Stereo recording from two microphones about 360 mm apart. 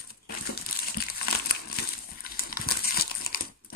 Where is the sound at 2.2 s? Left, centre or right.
Left.